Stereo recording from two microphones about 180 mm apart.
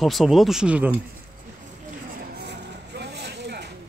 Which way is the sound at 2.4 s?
70° right (ahead or behind).